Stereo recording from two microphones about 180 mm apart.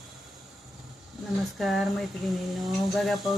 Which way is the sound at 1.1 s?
Centre (ahead or behind).